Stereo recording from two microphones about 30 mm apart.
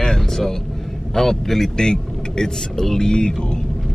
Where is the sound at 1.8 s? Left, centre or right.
Left.